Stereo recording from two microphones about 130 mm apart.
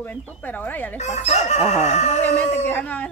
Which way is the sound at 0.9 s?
60° left (ahead or behind).